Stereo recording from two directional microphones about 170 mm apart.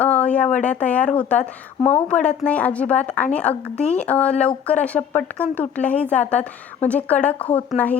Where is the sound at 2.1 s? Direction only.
5° left (ahead or behind).